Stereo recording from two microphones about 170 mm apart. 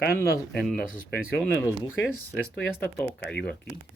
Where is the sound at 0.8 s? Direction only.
55° left (ahead or behind).